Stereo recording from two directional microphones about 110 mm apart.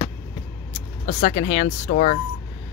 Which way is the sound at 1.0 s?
55° left (ahead or behind).